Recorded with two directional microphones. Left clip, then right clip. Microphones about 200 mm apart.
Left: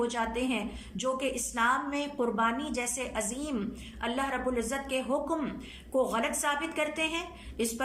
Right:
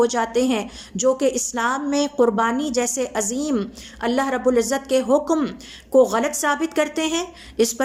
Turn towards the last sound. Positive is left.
turn(degrees=-25)  # may be behind; listen again after turning